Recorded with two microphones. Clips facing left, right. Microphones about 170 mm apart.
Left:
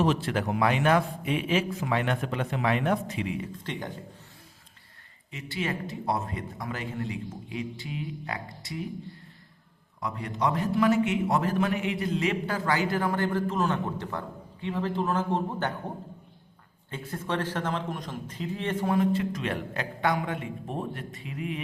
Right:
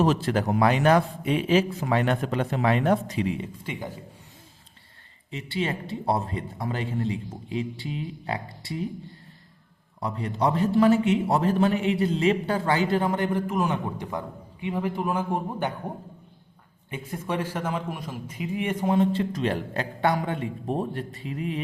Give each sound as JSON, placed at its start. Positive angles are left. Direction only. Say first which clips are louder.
{"t": 0.0, "sound": "a man's voice", "louder": "right 3 dB", "side_deg": -40}
{"t": 3.5, "sound": "a man's voice", "louder": "right 1 dB", "side_deg": -10}
{"t": 5.3, "sound": "a man's voice", "louder": "right 3 dB", "side_deg": -30}
{"t": 10.0, "sound": "a man's voice", "louder": "right 3 dB", "side_deg": -30}
{"t": 16.9, "sound": "a man's voice", "louder": "right 2 dB", "side_deg": -10}
{"t": 18.9, "sound": "a man's voice", "louder": "right 2 dB", "side_deg": -30}